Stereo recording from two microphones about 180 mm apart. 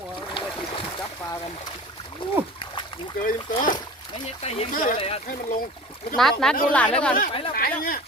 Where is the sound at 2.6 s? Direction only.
25° left (ahead or behind).